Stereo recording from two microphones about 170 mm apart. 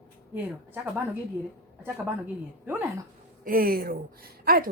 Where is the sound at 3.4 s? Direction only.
60° right (ahead or behind).